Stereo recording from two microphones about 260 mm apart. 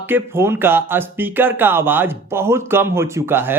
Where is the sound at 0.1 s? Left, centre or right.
Centre.